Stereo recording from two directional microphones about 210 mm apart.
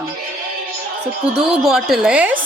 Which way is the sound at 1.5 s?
Centre (ahead or behind).